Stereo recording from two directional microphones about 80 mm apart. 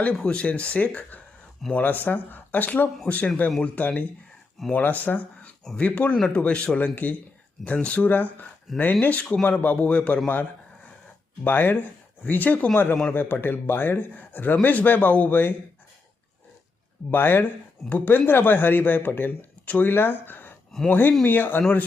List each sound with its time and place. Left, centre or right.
0.2 s speech: centre
11.4 s speech: left
17.1 s speech: left
20.7 s speech: centre
21.2 s speech: left